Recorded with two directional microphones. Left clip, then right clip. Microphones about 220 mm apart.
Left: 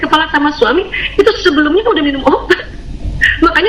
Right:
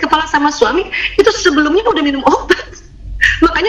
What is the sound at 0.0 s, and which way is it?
A woman's voice, 45° right (ahead or behind).